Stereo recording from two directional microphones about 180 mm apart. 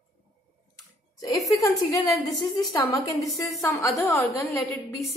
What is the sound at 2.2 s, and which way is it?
A woman's voice, 20° left (ahead or behind).